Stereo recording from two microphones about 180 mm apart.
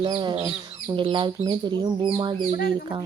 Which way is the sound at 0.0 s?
25° right (ahead or behind).